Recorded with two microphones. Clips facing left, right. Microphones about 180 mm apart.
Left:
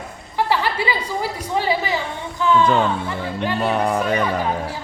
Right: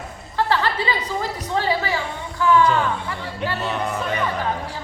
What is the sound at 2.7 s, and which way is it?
Speech, 20° left (ahead or behind).